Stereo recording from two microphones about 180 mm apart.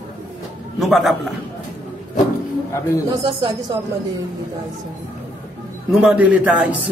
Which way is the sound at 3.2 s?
20° right (ahead or behind).